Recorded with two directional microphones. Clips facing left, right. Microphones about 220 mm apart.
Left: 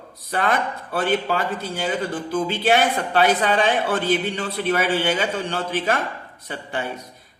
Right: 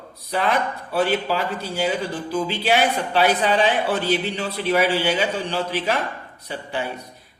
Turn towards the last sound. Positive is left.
turn(degrees=50)  # may be behind; listen again after turning